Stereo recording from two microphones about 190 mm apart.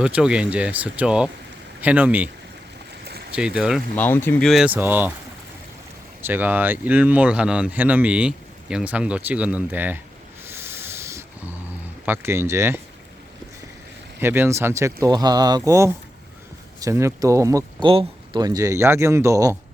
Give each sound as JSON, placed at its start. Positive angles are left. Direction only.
{"t": 0.0, "sound": "speech", "side_deg": -5}
{"t": 3.0, "sound": "boat", "side_deg": -55}
{"t": 3.3, "sound": "speech", "side_deg": -5}
{"t": 3.9, "sound": "speech", "side_deg": 10}
{"t": 6.2, "sound": "speech", "side_deg": -10}
{"t": 10.4, "sound": "rub", "side_deg": -10}
{"t": 12.0, "sound": "speech", "side_deg": -10}
{"t": 14.2, "sound": "speech", "side_deg": -10}